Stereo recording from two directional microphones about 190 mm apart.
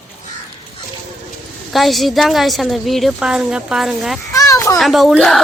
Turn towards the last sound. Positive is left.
turn(degrees=0)  # may be behind; listen again after turning